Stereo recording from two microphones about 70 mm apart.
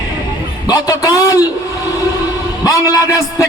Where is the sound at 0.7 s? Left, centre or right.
Left.